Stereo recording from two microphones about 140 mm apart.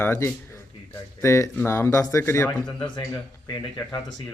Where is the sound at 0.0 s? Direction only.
15° left (ahead or behind).